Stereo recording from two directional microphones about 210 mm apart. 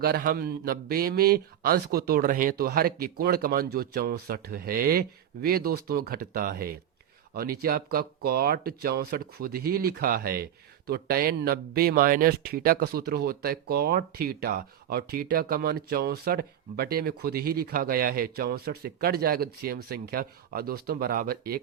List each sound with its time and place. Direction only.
0.0 s speech: 45° right (ahead or behind)